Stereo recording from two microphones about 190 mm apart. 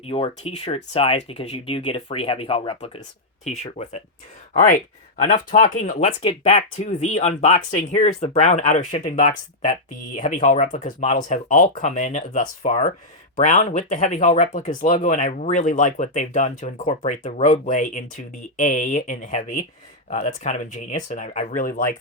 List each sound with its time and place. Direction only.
0.0 s speech: 30° left (ahead or behind); by 21.9 s 45° left (ahead or behind)